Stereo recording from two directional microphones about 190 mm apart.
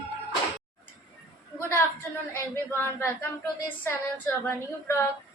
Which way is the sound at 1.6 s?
15° left (ahead or behind).